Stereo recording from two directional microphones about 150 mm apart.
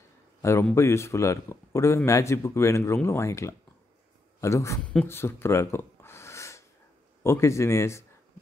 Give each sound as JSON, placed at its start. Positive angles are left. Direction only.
{"t": 0.4, "sound": "a man's voice", "side_deg": 20}